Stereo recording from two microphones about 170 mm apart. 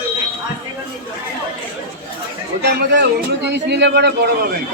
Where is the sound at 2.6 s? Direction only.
80° right.